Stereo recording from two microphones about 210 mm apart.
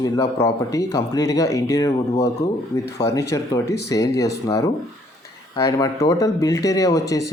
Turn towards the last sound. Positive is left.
turn(degrees=15)  # may be behind; listen again after turning